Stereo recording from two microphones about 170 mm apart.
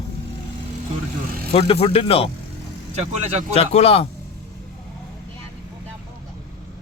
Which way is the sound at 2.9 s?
40° right (ahead or behind).